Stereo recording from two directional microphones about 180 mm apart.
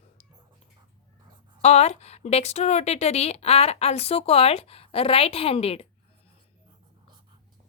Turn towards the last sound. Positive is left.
turn(degrees=35)  # may be behind; listen again after turning